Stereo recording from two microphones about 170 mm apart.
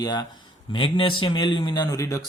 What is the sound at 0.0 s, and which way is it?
A man's voice, 25° left (ahead or behind).